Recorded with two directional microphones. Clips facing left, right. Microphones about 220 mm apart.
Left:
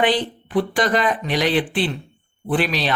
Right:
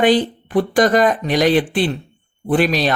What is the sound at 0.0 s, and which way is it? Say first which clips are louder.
Speech: right 5 dB; 45° right (ahead or behind).